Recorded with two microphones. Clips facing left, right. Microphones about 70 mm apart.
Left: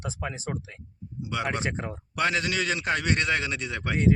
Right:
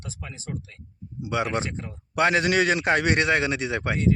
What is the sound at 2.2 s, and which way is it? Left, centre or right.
Speech, right.